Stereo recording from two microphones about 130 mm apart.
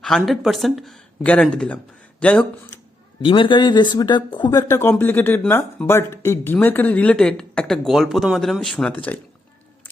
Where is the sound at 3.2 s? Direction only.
40° left (ahead or behind).